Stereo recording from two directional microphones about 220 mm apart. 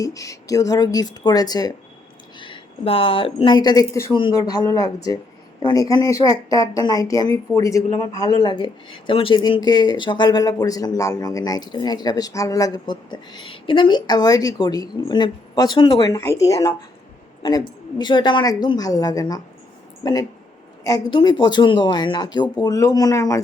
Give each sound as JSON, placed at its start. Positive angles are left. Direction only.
{"t": 0.0, "sound": "speech", "side_deg": 15}
{"t": 20.8, "sound": "speech", "side_deg": 20}